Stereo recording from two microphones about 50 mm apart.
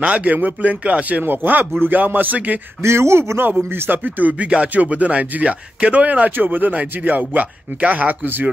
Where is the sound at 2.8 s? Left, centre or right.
Right.